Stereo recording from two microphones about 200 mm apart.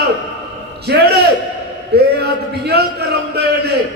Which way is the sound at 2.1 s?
55° right (ahead or behind).